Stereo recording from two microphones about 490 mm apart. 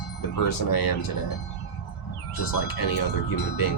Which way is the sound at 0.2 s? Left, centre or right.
Left.